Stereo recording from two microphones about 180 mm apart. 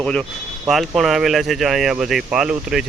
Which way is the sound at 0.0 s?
5° left (ahead or behind).